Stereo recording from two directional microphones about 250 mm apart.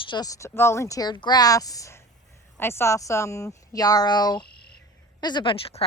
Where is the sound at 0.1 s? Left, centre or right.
Centre.